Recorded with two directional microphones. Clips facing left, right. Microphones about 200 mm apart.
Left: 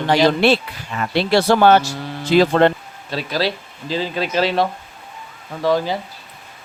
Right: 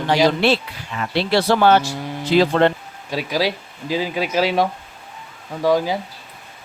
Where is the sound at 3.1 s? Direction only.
10° right (ahead or behind).